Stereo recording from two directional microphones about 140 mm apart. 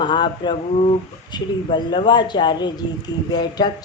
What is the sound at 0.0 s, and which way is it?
Speech, 35° left (ahead or behind).